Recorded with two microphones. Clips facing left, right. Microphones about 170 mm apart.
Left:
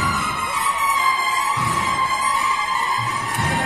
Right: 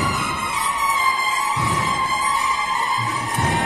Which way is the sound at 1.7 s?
Centre (ahead or behind).